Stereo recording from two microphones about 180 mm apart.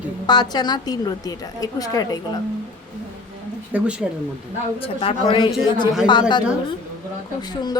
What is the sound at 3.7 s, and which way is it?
Speech, 5° right (ahead or behind).